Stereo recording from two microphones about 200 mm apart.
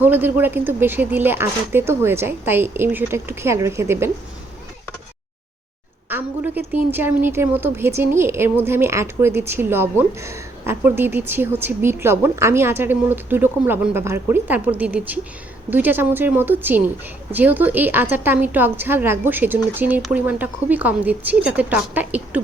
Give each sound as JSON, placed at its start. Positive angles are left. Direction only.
{"t": 0.0, "sound": "a woman's voice", "side_deg": -10}
{"t": 6.1, "sound": "a woman's voice", "side_deg": -10}